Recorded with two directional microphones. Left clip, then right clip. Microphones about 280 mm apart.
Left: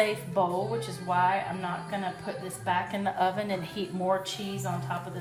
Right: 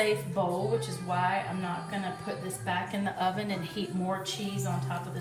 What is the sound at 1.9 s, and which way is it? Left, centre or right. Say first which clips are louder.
A woman's voice: left 2 dB; left.